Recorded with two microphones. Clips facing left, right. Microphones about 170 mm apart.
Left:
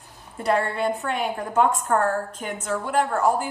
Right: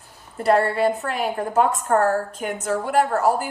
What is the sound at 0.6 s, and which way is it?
Speech, centre (ahead or behind).